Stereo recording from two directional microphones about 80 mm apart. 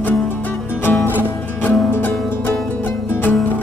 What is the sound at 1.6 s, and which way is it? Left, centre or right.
Music, left.